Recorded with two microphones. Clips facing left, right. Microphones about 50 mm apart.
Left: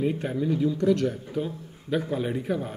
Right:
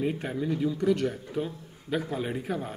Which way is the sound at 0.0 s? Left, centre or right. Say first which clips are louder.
Left 3 dB; centre.